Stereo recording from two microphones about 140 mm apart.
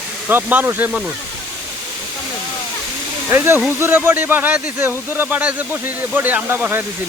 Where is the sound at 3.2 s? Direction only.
15° right (ahead or behind).